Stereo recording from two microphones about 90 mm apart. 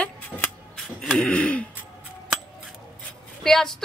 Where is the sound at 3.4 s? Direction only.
5° left (ahead or behind).